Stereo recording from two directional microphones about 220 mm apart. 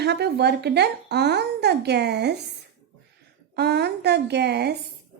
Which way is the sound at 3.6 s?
50° right (ahead or behind).